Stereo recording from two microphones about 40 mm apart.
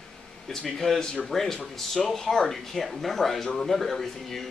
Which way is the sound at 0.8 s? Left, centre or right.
Centre.